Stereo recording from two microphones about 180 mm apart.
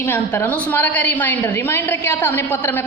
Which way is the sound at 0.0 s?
10° left (ahead or behind).